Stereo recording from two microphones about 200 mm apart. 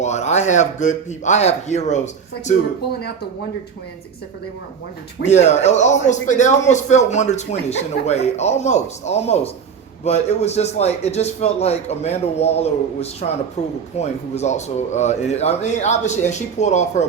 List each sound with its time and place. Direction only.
0.0 s speech: 35° left (ahead or behind)
5.2 s speech: 35° left (ahead or behind)